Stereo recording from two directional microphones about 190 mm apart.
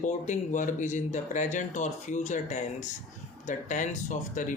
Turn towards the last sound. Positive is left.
turn(degrees=40)  # may be behind; listen again after turning